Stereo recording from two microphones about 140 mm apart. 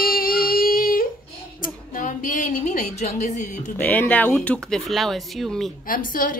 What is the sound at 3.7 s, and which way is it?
Speech, 15° left (ahead or behind).